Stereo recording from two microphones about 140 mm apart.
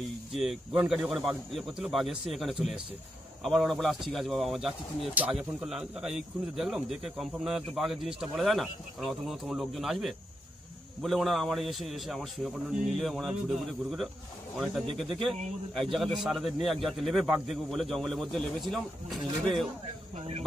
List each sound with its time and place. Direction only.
0.3 s speech: centre (ahead or behind)
20.2 s speech: 50° right (ahead or behind)